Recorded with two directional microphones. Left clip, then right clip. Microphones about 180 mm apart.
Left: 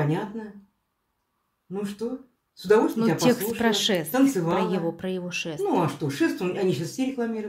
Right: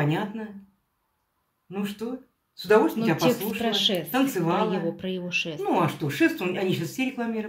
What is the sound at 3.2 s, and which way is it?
Speech, 25° left (ahead or behind).